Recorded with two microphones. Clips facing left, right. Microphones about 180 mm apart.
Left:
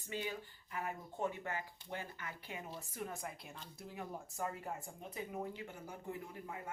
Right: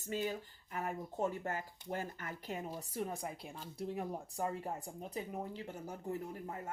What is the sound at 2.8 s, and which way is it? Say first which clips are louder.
Speech: right 5 dB; 30° right (ahead or behind).